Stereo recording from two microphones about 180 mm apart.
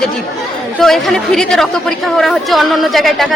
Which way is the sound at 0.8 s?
Centre (ahead or behind).